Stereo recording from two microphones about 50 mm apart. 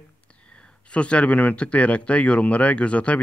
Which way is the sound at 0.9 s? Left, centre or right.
Left.